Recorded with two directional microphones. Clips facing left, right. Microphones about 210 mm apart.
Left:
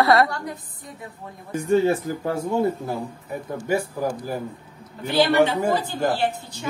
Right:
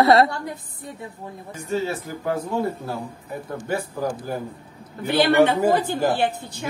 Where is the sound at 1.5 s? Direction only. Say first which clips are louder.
Left 7 dB; 55° left (ahead or behind).